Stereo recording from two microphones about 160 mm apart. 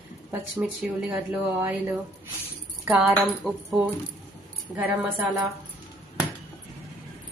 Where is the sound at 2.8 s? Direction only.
Centre (ahead or behind).